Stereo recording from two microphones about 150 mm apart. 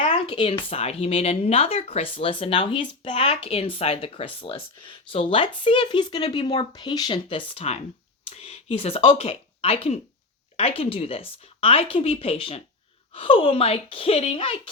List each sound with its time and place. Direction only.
0.3 s speech: 35° left (ahead or behind)